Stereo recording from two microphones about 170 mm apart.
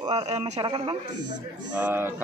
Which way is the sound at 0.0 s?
25° right (ahead or behind).